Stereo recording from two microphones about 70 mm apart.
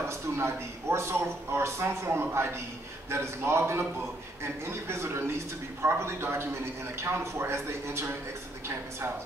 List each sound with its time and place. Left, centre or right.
0.4 s a man's voice: right